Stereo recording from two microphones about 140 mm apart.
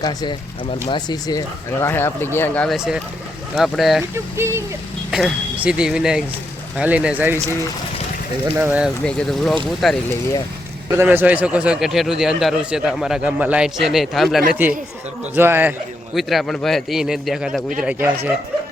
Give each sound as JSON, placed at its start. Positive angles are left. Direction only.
{"t": 0.0, "sound": "speech", "side_deg": 30}
{"t": 2.6, "sound": "a man's voice", "side_deg": -5}
{"t": 4.1, "sound": "speech", "side_deg": -20}
{"t": 5.1, "sound": "a man's voice", "side_deg": -5}
{"t": 8.5, "sound": "speech", "side_deg": -10}
{"t": 9.0, "sound": "a man's voice", "side_deg": 5}
{"t": 10.9, "sound": "a man's voice", "side_deg": -15}
{"t": 15.4, "sound": "speech", "side_deg": -15}
{"t": 16.1, "sound": "a man's voice", "side_deg": 0}